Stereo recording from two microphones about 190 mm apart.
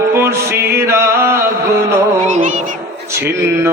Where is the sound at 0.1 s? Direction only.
15° right (ahead or behind).